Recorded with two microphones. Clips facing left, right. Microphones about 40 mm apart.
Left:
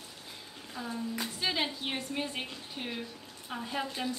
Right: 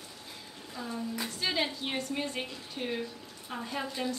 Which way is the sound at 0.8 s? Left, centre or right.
Centre.